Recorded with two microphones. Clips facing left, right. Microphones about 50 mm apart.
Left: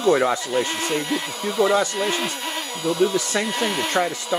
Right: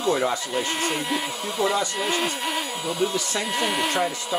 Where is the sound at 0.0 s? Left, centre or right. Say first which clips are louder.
Left 4 dB; left.